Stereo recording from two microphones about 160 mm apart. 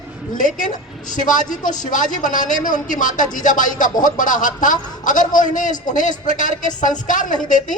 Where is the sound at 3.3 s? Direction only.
55° left (ahead or behind).